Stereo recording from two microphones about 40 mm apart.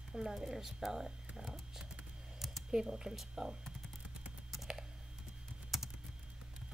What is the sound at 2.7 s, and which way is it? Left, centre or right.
Speech, centre.